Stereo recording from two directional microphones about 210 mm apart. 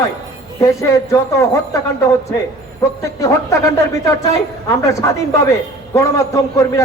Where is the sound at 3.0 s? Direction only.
15° left (ahead or behind).